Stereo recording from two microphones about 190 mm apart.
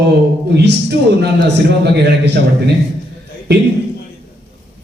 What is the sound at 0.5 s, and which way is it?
Speech, 60° right (ahead or behind).